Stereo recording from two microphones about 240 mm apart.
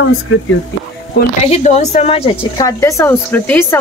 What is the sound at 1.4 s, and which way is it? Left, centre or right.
Speech, left.